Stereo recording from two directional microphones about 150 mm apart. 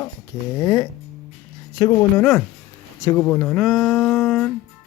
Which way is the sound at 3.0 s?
25° left (ahead or behind).